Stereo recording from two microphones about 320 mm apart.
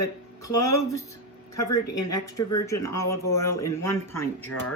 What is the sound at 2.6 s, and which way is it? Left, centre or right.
Speech, centre.